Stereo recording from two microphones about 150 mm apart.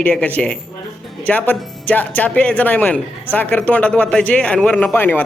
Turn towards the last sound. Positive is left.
turn(degrees=15)  # may be behind; listen again after turning